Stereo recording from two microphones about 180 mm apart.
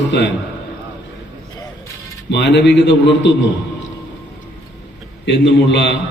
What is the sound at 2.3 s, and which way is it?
A man's voice, 75° left (ahead or behind).